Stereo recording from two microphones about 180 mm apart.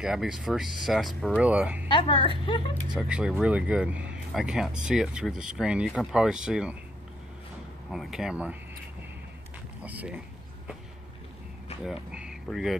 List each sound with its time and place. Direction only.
0.0 s speech: 5° right (ahead or behind)
1.9 s a woman's voice: 30° left (ahead or behind)
3.0 s speech: 5° right (ahead or behind)
7.9 s speech: centre (ahead or behind)
9.8 s speech: 10° right (ahead or behind)
11.8 s speech: 5° right (ahead or behind)